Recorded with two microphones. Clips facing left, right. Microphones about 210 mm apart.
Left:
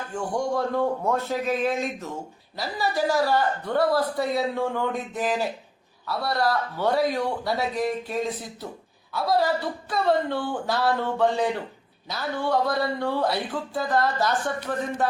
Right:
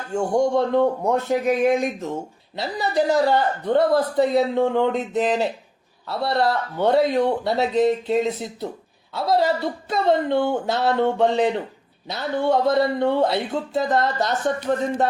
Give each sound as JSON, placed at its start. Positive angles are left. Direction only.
{"t": 0.1, "sound": "a man's voice", "side_deg": -25}